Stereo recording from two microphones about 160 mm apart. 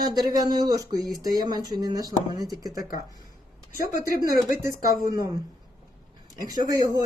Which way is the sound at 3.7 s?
55° left (ahead or behind).